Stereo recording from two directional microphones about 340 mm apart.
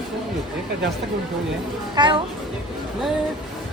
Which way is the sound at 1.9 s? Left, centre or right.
Centre.